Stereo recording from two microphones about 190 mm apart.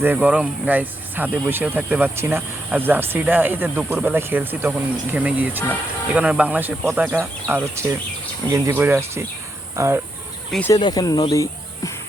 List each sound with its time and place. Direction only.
0.0 s speech: 10° right (ahead or behind)
10.7 s speech: 20° left (ahead or behind)